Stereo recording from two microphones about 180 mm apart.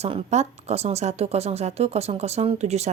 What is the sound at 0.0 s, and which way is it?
Speech, 35° right (ahead or behind).